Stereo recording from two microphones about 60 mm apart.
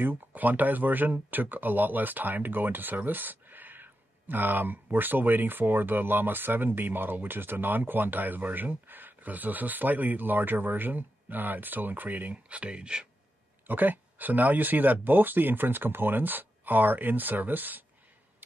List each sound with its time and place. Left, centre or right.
0.0 s speech: right
13.7 s speech: right